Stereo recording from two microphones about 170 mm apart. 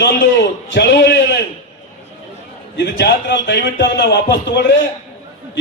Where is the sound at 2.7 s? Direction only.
75° left (ahead or behind).